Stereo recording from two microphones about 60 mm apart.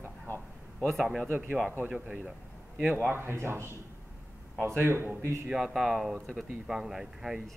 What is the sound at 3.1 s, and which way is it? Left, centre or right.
Speech, right.